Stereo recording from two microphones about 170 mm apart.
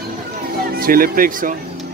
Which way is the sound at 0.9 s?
55° right (ahead or behind).